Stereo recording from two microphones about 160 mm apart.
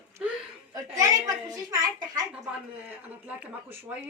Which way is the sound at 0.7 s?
20° right (ahead or behind).